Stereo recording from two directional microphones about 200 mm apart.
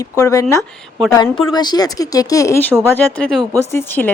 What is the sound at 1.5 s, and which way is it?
Speech, 20° left (ahead or behind).